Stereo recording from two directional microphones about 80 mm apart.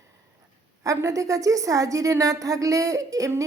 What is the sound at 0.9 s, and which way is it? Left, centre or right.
A woman's voice, right.